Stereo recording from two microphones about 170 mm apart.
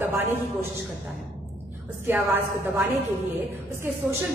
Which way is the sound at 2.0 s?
15° right (ahead or behind).